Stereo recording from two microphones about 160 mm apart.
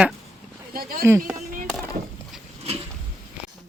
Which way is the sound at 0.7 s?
65° right (ahead or behind).